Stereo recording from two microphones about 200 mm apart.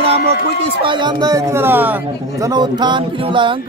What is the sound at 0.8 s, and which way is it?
Speech, 20° right (ahead or behind).